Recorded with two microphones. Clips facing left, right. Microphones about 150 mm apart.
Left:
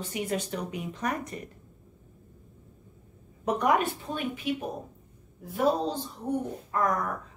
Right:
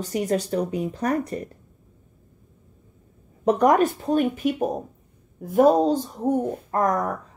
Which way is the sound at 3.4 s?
40° right (ahead or behind).